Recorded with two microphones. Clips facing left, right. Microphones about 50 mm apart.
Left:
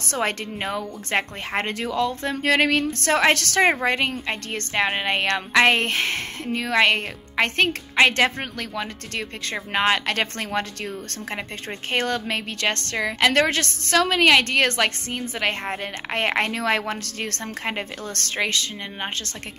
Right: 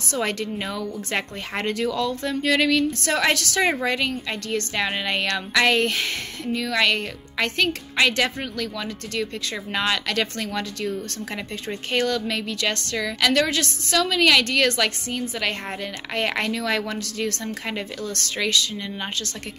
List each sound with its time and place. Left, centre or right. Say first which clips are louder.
0.2 s a woman's voice: left 1 dB; left
2.4 s a woman's voice: left 1 dB; left
3.7 s a woman's voice: left 1 dB; left